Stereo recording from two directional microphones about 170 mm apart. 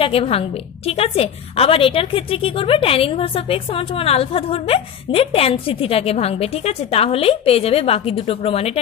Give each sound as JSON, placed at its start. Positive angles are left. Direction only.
{"t": 0.0, "sound": "a woman's voice", "side_deg": 35}